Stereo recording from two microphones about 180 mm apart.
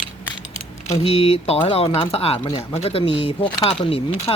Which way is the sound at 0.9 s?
35° left (ahead or behind).